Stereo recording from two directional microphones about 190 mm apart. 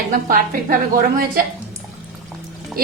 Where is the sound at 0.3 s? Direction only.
50° right (ahead or behind).